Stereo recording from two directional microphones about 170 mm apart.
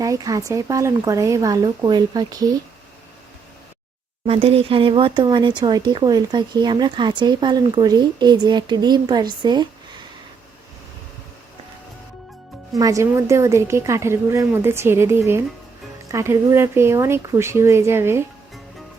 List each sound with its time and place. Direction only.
0.0 s speech: 20° right (ahead or behind)
4.3 s speech: 35° right (ahead or behind)
12.7 s a woman's voice: 20° right (ahead or behind)